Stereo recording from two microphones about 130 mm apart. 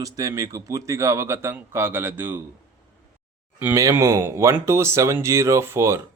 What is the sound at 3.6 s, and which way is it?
Speech, 20° right (ahead or behind).